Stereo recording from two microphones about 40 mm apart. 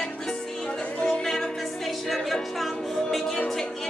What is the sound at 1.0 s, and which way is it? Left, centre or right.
Music, centre.